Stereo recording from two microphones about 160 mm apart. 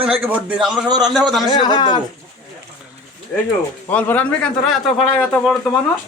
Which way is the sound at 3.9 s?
10° left (ahead or behind).